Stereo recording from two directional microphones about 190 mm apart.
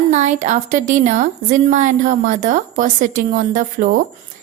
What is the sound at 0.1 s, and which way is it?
A woman's voice, 35° right (ahead or behind).